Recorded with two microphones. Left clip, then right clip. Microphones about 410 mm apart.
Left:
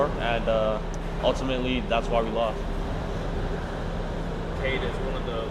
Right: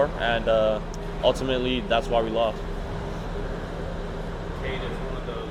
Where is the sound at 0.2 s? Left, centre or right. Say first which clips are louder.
Right 3 dB; right.